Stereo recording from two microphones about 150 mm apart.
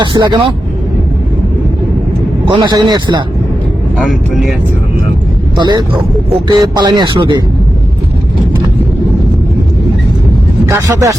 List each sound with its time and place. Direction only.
0.0 s speech: 30° right (ahead or behind)
2.6 s speech: 30° right (ahead or behind)
3.9 s speech: centre (ahead or behind)
5.5 s speech: 30° right (ahead or behind)
10.7 s speech: 20° right (ahead or behind)